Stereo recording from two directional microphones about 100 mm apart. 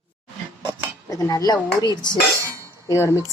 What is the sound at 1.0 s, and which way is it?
Speech, 35° left (ahead or behind).